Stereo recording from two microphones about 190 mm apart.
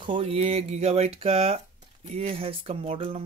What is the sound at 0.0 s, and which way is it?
Speech, 30° right (ahead or behind).